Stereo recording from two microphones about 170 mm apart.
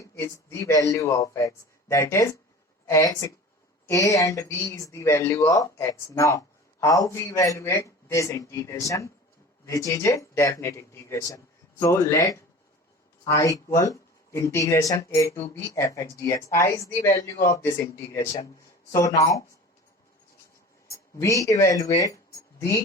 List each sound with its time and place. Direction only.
0.0 s speech: 20° left (ahead or behind)
20.9 s speech: 20° left (ahead or behind)